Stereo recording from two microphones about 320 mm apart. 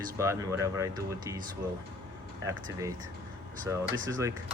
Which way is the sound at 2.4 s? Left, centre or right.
Centre.